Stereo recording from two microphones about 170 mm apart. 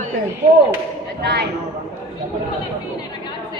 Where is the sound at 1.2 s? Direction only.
75° right (ahead or behind).